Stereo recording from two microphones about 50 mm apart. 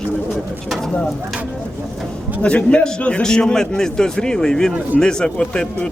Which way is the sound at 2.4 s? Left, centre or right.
Left.